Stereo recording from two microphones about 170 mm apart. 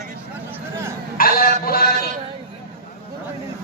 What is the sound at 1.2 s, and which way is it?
Speech, 60° left (ahead or behind).